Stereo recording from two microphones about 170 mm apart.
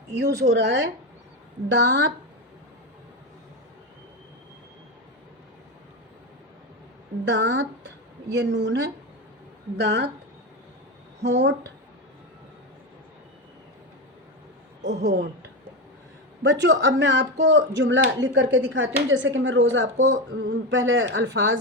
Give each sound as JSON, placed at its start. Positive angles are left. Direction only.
{"t": 0.1, "sound": "speech", "side_deg": -75}
{"t": 7.3, "sound": "speech", "side_deg": -90}
{"t": 11.2, "sound": "speech", "side_deg": -90}
{"t": 14.8, "sound": "a woman's voice", "side_deg": -45}
{"t": 15.0, "sound": "speech", "side_deg": -70}
{"t": 16.4, "sound": "speech", "side_deg": -90}